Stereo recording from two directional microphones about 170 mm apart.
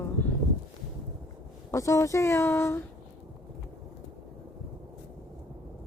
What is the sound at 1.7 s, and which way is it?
Speech, 20° left (ahead or behind).